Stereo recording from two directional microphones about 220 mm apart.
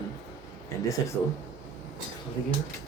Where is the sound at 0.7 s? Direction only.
15° left (ahead or behind).